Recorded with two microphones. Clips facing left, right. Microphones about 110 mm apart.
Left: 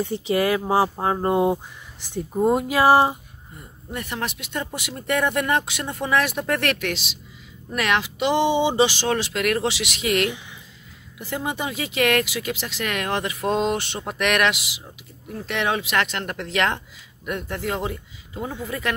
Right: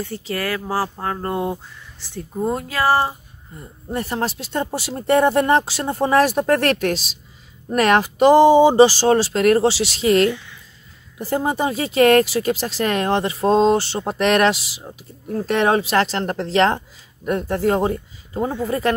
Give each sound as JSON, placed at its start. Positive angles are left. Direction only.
{"t": 0.0, "sound": "speech", "side_deg": 15}
{"t": 3.9, "sound": "speech", "side_deg": -35}